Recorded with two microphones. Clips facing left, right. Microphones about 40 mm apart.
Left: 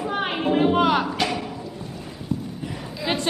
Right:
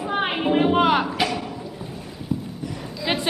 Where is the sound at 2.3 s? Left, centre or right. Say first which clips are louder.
Right 1 dB; centre.